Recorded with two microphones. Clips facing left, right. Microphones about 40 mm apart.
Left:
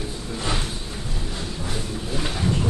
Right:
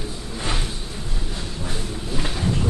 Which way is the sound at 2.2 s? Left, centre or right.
Centre.